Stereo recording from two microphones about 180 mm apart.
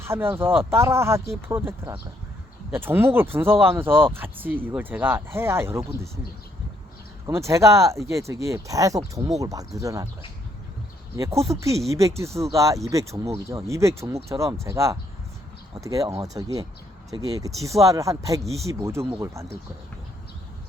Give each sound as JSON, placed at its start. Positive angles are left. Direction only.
{"t": 0.0, "sound": "speech", "side_deg": -15}
{"t": 2.7, "sound": "speech", "side_deg": -10}
{"t": 7.3, "sound": "speech", "side_deg": -15}
{"t": 11.5, "sound": "speech", "side_deg": -15}